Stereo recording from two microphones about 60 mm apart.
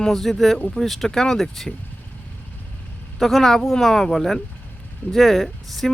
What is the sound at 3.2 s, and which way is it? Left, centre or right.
Speech, centre.